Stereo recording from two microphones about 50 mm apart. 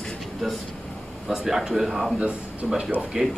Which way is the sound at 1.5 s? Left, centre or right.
Centre.